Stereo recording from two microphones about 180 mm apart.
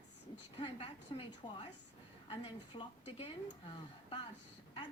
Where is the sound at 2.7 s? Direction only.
30° left (ahead or behind).